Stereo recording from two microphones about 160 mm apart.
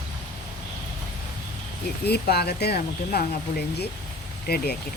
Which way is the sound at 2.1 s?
85° left.